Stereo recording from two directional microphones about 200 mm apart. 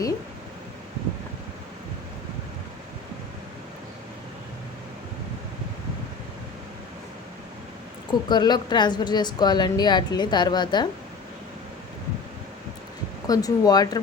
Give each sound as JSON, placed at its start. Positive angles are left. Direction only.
{"t": 8.3, "sound": "a woman's voice", "side_deg": 20}
{"t": 13.2, "sound": "a woman's voice", "side_deg": 20}